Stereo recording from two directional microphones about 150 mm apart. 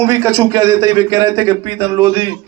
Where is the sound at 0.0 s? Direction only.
20° right (ahead or behind).